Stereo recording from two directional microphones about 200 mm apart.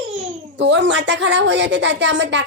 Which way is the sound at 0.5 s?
65° right (ahead or behind).